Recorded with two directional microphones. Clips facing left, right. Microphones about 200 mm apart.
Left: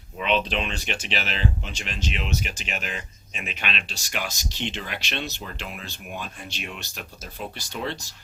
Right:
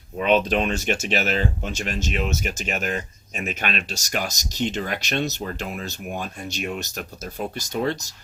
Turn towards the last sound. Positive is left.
turn(degrees=-45)  # may be behind; listen again after turning